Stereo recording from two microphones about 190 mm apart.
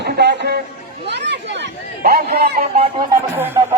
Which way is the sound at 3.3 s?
10° right (ahead or behind).